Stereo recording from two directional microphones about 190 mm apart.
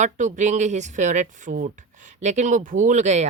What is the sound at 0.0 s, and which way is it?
Speech, 40° right (ahead or behind).